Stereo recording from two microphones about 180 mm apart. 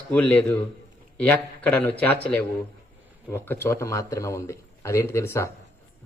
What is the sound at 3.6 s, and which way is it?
Speech, 15° left (ahead or behind).